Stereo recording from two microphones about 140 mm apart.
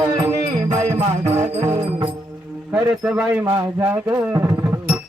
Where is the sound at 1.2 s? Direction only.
50° right (ahead or behind).